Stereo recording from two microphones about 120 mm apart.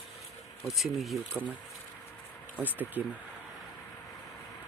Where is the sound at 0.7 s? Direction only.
Centre (ahead or behind).